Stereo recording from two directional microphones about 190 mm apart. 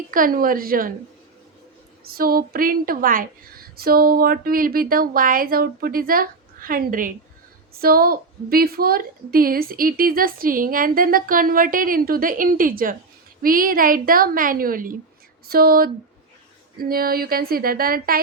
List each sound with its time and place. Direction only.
0.1 s a woman's voice: 45° right (ahead or behind)
2.0 s a woman's voice: 50° right (ahead or behind)